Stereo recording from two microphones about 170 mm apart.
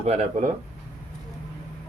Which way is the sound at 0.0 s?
40° right (ahead or behind).